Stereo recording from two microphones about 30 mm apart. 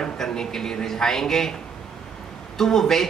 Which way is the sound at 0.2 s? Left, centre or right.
Centre.